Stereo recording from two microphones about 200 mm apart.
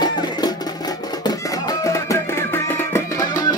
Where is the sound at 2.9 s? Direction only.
15° left (ahead or behind).